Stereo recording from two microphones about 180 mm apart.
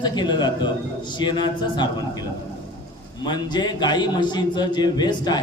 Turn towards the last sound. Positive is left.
turn(degrees=25)  # may be behind; listen again after turning